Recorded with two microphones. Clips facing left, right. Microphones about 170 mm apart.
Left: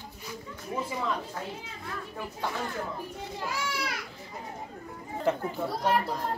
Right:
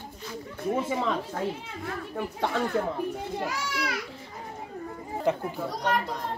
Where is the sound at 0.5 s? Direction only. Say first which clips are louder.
Right 7 dB; 70° right (ahead or behind).